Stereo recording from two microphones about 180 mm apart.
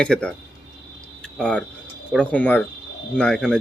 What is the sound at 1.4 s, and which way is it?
Speech, 5° left (ahead or behind).